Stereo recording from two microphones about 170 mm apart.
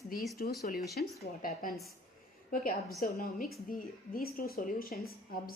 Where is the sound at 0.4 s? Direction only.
55° left (ahead or behind).